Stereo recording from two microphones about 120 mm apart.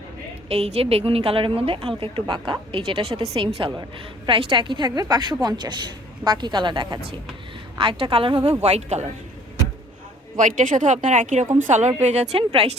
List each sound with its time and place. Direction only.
0.4 s a woman's voice: 55° right (ahead or behind)
8.4 s speech: 65° right (ahead or behind)
10.3 s a woman's voice: 90° right
12.0 s speech: 70° right (ahead or behind); by 12.7 s 55° right (ahead or behind)